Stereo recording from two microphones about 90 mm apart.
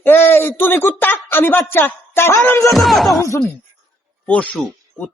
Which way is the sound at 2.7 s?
Centre (ahead or behind).